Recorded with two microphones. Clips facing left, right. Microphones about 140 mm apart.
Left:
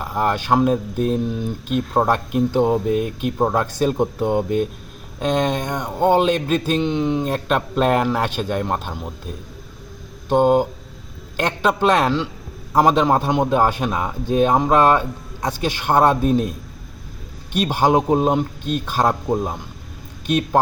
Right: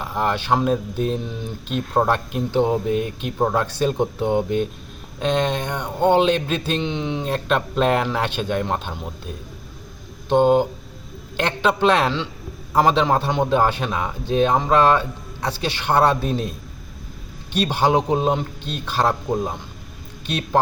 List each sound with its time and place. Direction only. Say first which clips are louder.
0.0 s a sound: left 2 dB; 5° left (ahead or behind)
0.4 s speech: left 3 dB; 5° left (ahead or behind)
15.6 s speech: left 3 dB; 45° left (ahead or behind)
15.9 s speech: left 3 dB; 10° left (ahead or behind)
17.7 s speech: left 3 dB; 10° left (ahead or behind)